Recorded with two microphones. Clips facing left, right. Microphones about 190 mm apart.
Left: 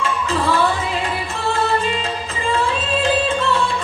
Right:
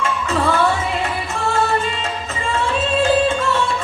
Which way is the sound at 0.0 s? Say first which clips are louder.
Right 1 dB; 35° left (ahead or behind).